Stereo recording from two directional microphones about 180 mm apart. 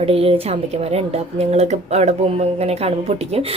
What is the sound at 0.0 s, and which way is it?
Speech, 30° right (ahead or behind).